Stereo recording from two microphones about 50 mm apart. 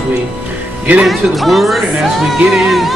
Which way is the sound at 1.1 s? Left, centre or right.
Centre.